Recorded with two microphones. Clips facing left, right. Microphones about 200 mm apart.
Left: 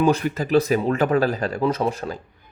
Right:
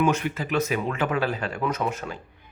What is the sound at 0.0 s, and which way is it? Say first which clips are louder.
A man's voice: left 4 dB; 35° left (ahead or behind).